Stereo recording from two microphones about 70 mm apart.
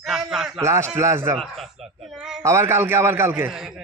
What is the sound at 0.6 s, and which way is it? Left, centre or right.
Speech, right.